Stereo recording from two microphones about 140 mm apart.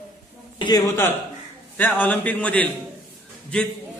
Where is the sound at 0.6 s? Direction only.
30° left (ahead or behind).